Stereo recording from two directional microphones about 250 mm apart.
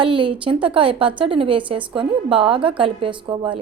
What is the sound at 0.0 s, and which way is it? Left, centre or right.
A woman's voice, centre.